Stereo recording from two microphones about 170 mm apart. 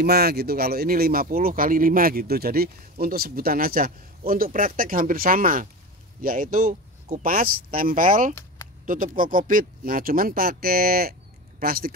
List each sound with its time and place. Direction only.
0.0 s speech: 70° right (ahead or behind)